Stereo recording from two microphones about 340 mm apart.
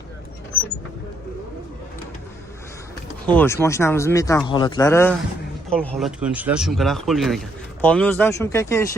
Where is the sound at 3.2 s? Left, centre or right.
Centre.